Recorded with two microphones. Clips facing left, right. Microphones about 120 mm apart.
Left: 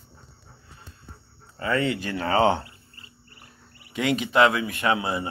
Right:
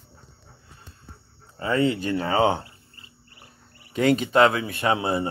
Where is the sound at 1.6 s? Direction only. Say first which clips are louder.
Right 2 dB; 25° right (ahead or behind).